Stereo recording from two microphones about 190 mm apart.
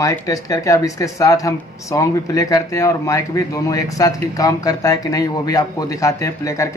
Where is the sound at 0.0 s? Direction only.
15° left (ahead or behind).